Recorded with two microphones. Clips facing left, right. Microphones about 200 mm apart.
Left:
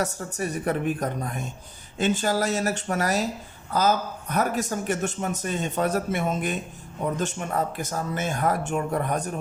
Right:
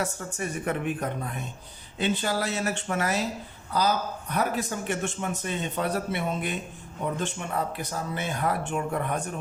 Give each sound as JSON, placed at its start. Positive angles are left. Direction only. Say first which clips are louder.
{"t": 0.0, "sound": "a man's voice", "louder": "left 3 dB", "side_deg": 35}